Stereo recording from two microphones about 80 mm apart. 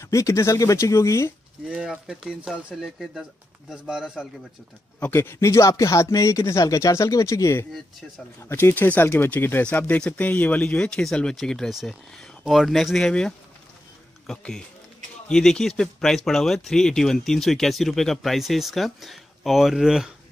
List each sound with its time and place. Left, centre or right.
0.0 s speech: left
1.7 s speech: centre
5.1 s speech: left; by 20.1 s centre